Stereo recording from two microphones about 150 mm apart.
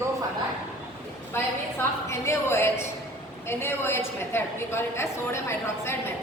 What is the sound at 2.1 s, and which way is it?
A woman's voice, 15° left (ahead or behind).